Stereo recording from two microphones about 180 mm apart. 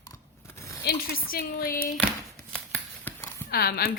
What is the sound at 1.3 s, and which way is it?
Speech, 55° left (ahead or behind).